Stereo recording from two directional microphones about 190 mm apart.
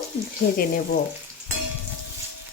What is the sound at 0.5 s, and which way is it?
Speech, 50° left (ahead or behind).